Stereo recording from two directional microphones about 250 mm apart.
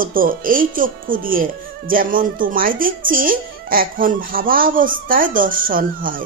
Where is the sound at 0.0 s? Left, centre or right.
Right.